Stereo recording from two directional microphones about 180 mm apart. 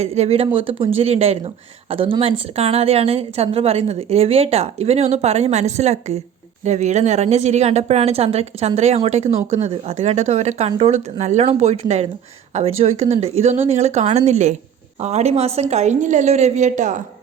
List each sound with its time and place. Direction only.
0.0 s a woman's voice: 35° right (ahead or behind)